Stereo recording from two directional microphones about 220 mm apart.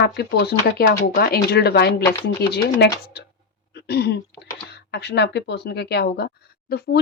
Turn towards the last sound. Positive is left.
turn(degrees=45)  # may be behind; listen again after turning